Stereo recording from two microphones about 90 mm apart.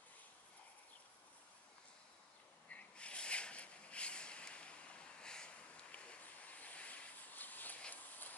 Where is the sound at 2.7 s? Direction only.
15° left (ahead or behind).